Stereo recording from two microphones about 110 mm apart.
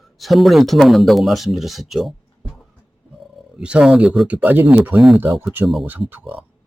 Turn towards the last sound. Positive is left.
turn(degrees=-20)  # may be behind; listen again after turning